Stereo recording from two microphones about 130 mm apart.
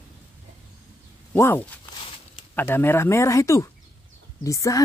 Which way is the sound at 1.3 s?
20° left (ahead or behind).